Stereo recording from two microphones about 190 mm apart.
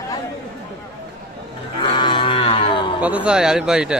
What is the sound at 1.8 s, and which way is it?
Cattle, 25° left (ahead or behind).